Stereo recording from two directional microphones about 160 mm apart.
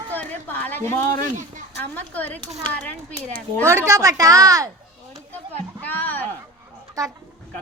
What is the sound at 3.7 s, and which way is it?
Speech, 20° right (ahead or behind).